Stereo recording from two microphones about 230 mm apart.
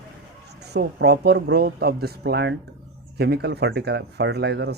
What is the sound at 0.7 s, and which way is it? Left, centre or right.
Speech, right.